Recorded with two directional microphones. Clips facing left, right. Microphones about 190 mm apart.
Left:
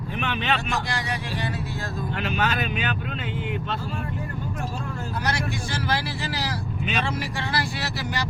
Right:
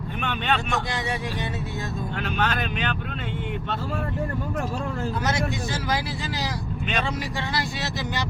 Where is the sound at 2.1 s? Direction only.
5° left (ahead or behind).